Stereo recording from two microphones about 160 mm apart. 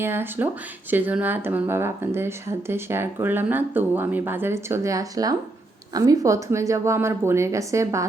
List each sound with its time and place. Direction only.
0.0 s a woman's voice: 15° right (ahead or behind)